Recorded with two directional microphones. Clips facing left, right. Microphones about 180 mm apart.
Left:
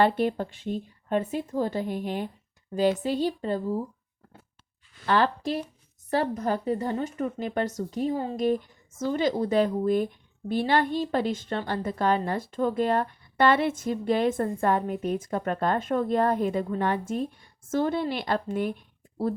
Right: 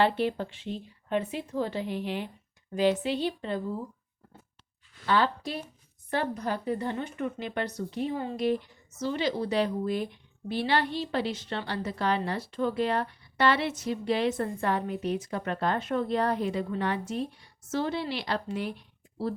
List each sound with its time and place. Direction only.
0.0 s a woman's voice: 45° left (ahead or behind)
5.0 s speech: 50° left (ahead or behind)